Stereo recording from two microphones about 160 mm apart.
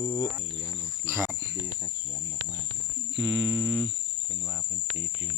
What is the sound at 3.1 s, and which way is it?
Humming, 25° right (ahead or behind).